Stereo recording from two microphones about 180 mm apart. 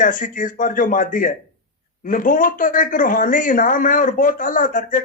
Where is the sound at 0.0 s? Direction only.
45° left (ahead or behind).